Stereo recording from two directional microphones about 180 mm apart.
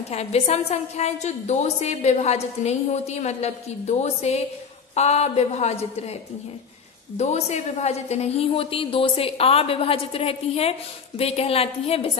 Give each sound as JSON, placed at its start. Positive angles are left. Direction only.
{"t": 0.1, "sound": "a woman's voice", "side_deg": 35}
{"t": 7.2, "sound": "a woman's voice", "side_deg": 35}